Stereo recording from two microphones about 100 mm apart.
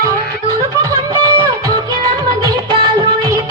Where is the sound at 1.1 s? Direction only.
40° right (ahead or behind).